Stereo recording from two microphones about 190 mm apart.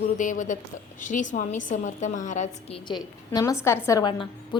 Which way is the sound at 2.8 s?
20° left (ahead or behind).